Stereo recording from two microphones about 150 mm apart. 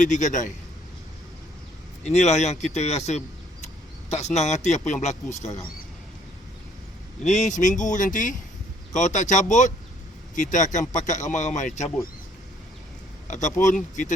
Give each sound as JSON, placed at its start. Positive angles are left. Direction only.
{"t": 0.0, "sound": "speech", "side_deg": 55}
{"t": 2.0, "sound": "speech", "side_deg": 50}
{"t": 7.3, "sound": "speech", "side_deg": 55}
{"t": 13.2, "sound": "speech", "side_deg": 55}